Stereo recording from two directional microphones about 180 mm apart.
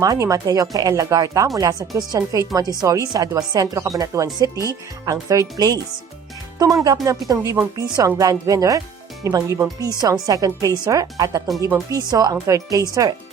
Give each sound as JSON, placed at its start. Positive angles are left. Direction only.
{"t": 0.0, "sound": "speech", "side_deg": -20}